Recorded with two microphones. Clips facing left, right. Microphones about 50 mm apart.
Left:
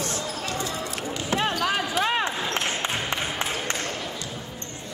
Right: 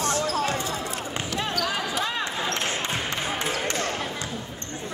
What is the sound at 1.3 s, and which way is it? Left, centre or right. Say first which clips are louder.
Basketball bounce: left 4 dB; left.